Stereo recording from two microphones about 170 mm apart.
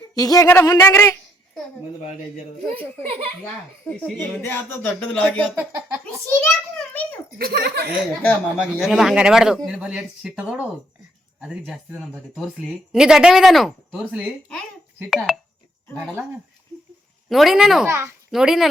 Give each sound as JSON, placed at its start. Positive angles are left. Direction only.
{"t": 0.1, "sound": "a woman's voice", "side_deg": 20}
{"t": 3.0, "sound": "a child's voice", "side_deg": -35}
{"t": 3.8, "sound": "a woman's voice", "side_deg": 10}
{"t": 5.5, "sound": "speech", "side_deg": -10}
{"t": 6.2, "sound": "a woman's voice", "side_deg": 10}
{"t": 7.3, "sound": "speech", "side_deg": -65}
{"t": 8.2, "sound": "a woman's voice", "side_deg": 10}
{"t": 17.2, "sound": "a woman's voice", "side_deg": 0}
{"t": 17.8, "sound": "speech", "side_deg": -15}
{"t": 18.3, "sound": "speech", "side_deg": 0}